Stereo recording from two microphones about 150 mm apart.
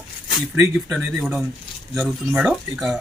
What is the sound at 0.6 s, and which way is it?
Speech, 5° right (ahead or behind).